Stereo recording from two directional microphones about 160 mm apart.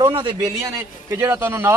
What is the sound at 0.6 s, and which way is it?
A man's voice, 15° right (ahead or behind).